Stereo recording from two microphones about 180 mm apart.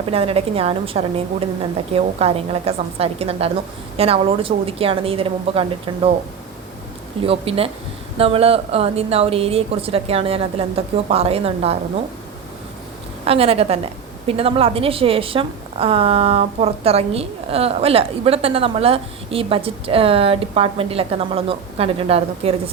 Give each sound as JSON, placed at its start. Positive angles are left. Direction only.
{"t": 0.1, "sound": "a woman's voice", "side_deg": -35}
{"t": 7.2, "sound": "a woman's voice", "side_deg": -30}
{"t": 13.2, "sound": "a woman's voice", "side_deg": -35}